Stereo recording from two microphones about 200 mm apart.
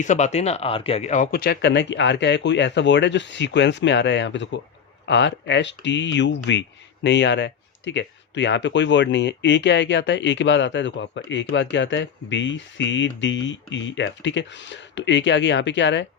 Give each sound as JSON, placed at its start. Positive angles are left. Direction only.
{"t": 0.0, "sound": "speech", "side_deg": 35}